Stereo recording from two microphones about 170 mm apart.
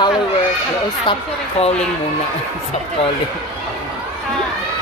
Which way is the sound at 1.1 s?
25° left (ahead or behind).